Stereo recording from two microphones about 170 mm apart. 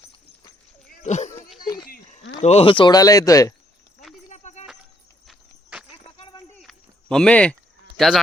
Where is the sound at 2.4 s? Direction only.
40° left (ahead or behind); by 3.5 s 20° left (ahead or behind).